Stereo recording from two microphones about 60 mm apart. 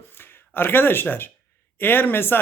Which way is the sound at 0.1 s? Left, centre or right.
Left.